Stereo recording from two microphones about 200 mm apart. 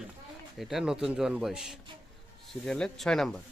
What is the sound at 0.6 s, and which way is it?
A man's voice, centre (ahead or behind).